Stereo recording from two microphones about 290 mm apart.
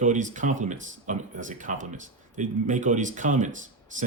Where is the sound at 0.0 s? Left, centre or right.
Right.